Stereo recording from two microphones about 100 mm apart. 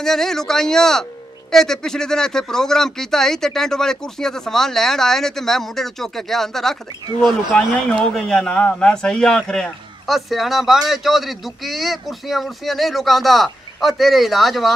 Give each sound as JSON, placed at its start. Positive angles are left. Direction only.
{"t": 0.0, "sound": "speech", "side_deg": 5}